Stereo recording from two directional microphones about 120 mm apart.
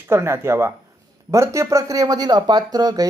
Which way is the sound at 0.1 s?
20° right (ahead or behind).